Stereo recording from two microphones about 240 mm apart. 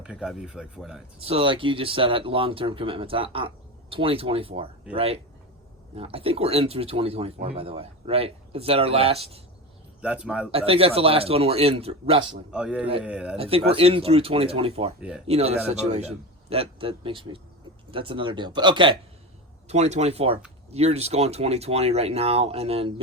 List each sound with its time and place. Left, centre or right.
0.0 s speech: centre
1.2 s speech: right
10.0 s speech: centre
10.5 s speech: right
12.5 s speech: centre
13.3 s speech: right